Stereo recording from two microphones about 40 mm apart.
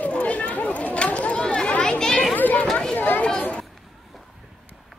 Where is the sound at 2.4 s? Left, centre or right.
Left.